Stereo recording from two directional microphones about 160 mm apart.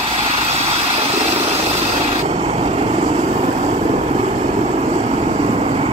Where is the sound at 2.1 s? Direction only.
40° right (ahead or behind).